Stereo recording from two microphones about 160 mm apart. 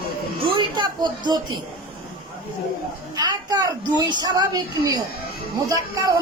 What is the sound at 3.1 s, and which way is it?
A woman's voice, 25° right (ahead or behind).